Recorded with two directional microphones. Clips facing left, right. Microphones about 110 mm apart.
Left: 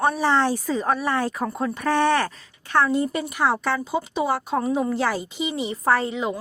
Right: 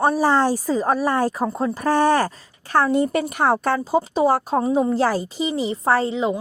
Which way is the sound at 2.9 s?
60° right (ahead or behind).